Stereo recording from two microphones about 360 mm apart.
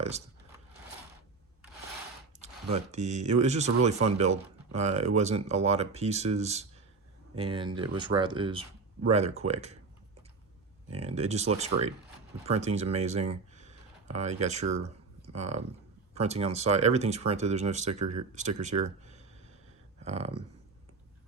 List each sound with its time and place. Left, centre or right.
2.7 s speech: centre
10.8 s speech: centre
13.6 s a sound: centre
15.4 s speech: centre
18.0 s speech: right
18.3 s speech: centre